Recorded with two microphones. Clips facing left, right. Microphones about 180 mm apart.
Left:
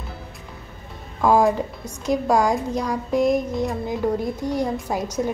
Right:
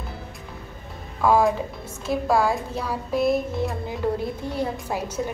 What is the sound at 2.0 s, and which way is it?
A woman's voice, 15° left (ahead or behind).